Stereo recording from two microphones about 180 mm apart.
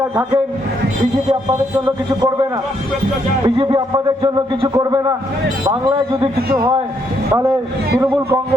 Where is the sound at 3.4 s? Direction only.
25° right (ahead or behind).